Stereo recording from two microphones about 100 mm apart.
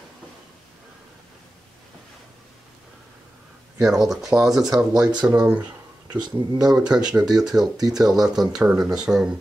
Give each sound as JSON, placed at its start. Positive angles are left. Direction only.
{"t": 3.7, "sound": "speech", "side_deg": -5}
{"t": 5.1, "sound": "speech", "side_deg": -35}
{"t": 5.4, "sound": "speech", "side_deg": -15}
{"t": 6.1, "sound": "speech", "side_deg": -45}
{"t": 6.9, "sound": "speech", "side_deg": -10}